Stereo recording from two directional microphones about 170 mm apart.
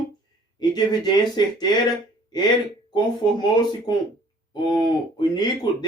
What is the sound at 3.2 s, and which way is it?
Speech, 25° left (ahead or behind).